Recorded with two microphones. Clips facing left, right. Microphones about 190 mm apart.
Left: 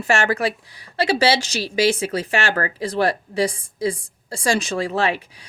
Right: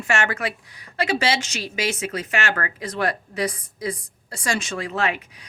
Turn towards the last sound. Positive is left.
turn(degrees=30)  # may be behind; listen again after turning